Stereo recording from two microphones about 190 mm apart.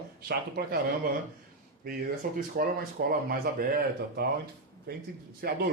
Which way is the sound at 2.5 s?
50° right (ahead or behind).